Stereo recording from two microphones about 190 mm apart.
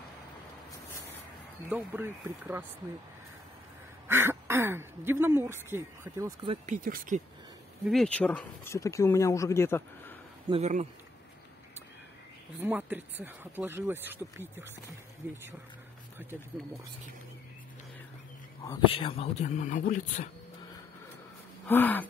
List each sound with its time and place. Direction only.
1.7 s speech: 10° right (ahead or behind)
4.1 s speech: 10° right (ahead or behind)
6.4 s speech: 35° right (ahead or behind)
7.8 s speech: centre (ahead or behind)
10.5 s speech: 35° right (ahead or behind)
12.6 s speech: 10° right (ahead or behind)
18.6 s speech: 25° left (ahead or behind); by 20.2 s 45° left (ahead or behind)
21.6 s speech: 10° left (ahead or behind)